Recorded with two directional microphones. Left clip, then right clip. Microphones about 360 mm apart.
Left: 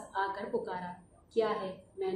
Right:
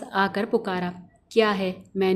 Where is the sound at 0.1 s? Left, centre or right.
Right.